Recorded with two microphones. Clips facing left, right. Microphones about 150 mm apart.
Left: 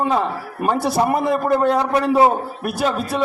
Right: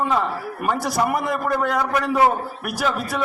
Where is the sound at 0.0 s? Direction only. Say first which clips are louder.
Left 2 dB; 25° left (ahead or behind).